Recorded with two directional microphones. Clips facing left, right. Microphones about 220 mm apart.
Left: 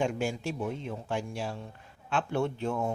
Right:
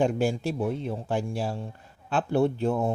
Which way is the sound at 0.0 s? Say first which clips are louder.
Right 6 dB; 35° right (ahead or behind).